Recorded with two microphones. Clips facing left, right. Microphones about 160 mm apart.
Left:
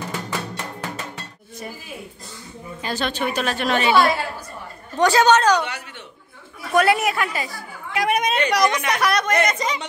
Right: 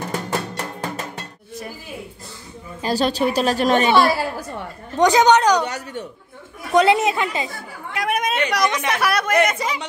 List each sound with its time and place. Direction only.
0.1 s music: 40° right (ahead or behind)
2.8 s a woman's voice: 35° right (ahead or behind)
4.9 s a woman's voice: 15° right (ahead or behind)
5.6 s a woman's voice: 40° right (ahead or behind)
6.7 s a woman's voice: 20° right (ahead or behind)
7.9 s speech: centre (ahead or behind)